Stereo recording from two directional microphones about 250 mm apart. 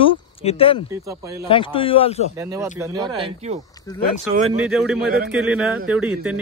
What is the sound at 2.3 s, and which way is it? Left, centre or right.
Speech, centre.